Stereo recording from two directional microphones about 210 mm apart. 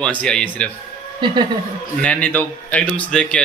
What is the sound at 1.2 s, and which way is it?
Speech, 20° right (ahead or behind).